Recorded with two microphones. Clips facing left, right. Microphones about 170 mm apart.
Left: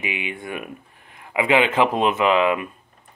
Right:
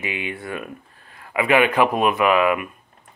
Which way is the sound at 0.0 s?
15° left (ahead or behind).